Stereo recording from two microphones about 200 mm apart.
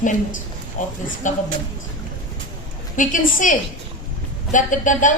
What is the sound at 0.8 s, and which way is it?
Speech, 40° left (ahead or behind).